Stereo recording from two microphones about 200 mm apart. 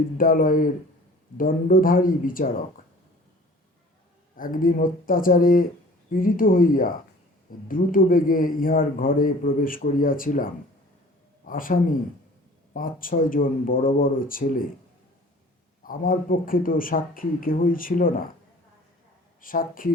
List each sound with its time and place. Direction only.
0.2 s a man's voice: 45° left (ahead or behind)
4.4 s a man's voice: 45° left (ahead or behind)
15.9 s a man's voice: 45° left (ahead or behind)
19.4 s a man's voice: 45° left (ahead or behind)